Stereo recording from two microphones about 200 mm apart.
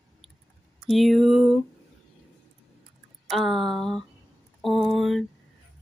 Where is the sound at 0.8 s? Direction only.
Centre (ahead or behind).